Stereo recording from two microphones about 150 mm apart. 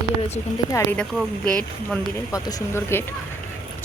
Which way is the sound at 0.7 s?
20° left (ahead or behind).